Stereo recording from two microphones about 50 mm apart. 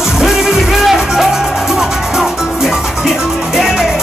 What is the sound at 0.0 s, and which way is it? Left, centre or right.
Music, centre.